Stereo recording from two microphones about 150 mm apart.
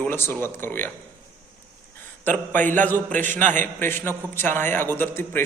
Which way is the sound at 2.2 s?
10° left (ahead or behind).